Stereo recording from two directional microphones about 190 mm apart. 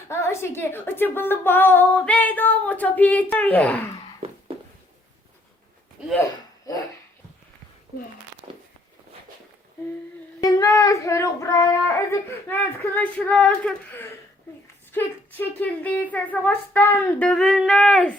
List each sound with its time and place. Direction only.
0.1 s speech: 15° left (ahead or behind)
4.2 s a sound: 30° right (ahead or behind)
6.7 s dog: 20° left (ahead or behind)
8.4 s walk: 20° right (ahead or behind)
10.4 s child singing: 15° left (ahead or behind)
14.9 s speech: 10° left (ahead or behind)